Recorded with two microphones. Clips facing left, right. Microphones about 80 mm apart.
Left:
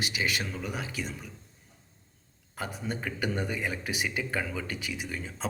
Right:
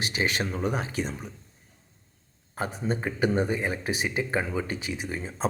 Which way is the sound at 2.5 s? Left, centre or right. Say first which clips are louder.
Right 5 dB; right.